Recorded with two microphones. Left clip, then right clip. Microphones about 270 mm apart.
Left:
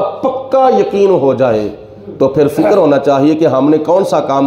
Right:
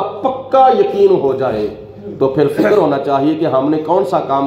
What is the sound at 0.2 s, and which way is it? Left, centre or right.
A man's voice, left.